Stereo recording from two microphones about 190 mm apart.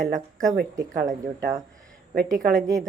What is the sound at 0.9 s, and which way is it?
Speech, 50° right (ahead or behind).